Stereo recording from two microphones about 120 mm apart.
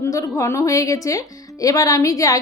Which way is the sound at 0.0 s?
25° left (ahead or behind).